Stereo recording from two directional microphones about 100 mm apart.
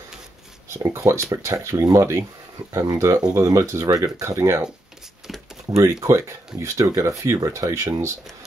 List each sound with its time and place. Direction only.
0.8 s speech: 30° right (ahead or behind)
5.2 s a sound: 5° right (ahead or behind)
5.8 s speech: 35° right (ahead or behind)